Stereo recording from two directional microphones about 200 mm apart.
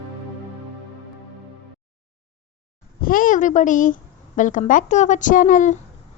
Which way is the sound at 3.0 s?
45° left (ahead or behind).